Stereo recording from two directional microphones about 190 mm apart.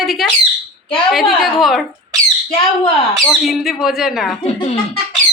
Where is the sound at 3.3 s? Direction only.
Centre (ahead or behind).